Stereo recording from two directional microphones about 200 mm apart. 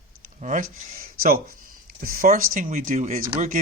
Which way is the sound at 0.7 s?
45° right (ahead or behind).